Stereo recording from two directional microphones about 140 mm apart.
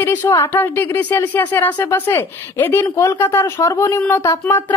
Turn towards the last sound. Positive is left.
turn(degrees=20)  # may be behind; listen again after turning